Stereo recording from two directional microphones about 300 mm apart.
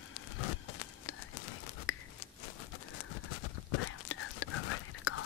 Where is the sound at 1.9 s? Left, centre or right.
Left.